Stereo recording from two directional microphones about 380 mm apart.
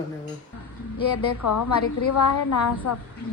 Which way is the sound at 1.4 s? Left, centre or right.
Left.